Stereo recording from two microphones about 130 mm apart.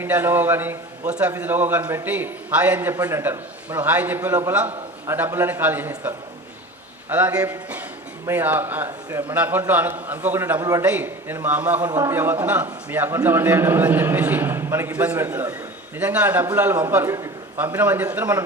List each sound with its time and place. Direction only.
0.0 s a man's voice: 15° right (ahead or behind)
7.1 s a man's voice: 10° right (ahead or behind)
10.6 s a man's voice: 25° right (ahead or behind)
10.8 s a man's voice: 15° right (ahead or behind)
11.9 s a man's voice: 25° right (ahead or behind)